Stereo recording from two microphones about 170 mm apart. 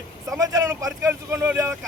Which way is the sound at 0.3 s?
20° right (ahead or behind).